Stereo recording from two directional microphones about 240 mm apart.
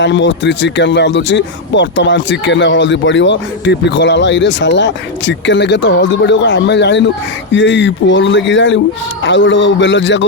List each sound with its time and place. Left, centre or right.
0.0 s speech: left